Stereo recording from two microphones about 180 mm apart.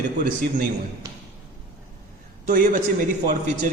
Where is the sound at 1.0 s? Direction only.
20° right (ahead or behind).